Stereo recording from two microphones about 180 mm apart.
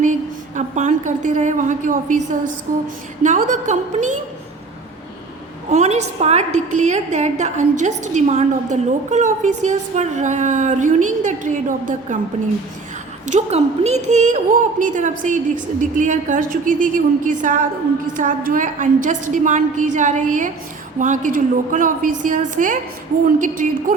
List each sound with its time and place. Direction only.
0.0 s a woman's voice: 45° right (ahead or behind)
3.2 s a woman's voice: 45° right (ahead or behind)
5.7 s a woman's voice: 40° right (ahead or behind)
13.2 s a woman's voice: 40° right (ahead or behind)